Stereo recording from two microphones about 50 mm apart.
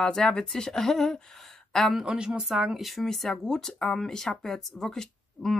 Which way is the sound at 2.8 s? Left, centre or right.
Centre.